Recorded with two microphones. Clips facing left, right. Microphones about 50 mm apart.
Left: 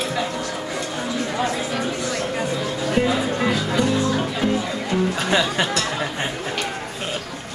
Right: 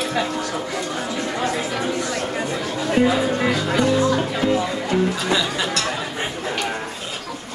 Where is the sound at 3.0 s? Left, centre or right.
Centre.